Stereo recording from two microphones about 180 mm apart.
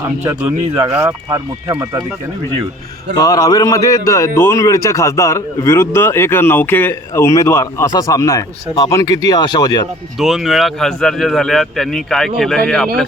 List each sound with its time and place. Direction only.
0.9 s speech: 15° right (ahead or behind)
3.2 s a man's voice: 20° left (ahead or behind)
10.2 s speech: centre (ahead or behind)